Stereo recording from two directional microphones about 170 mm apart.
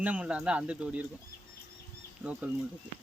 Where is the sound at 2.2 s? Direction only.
10° right (ahead or behind).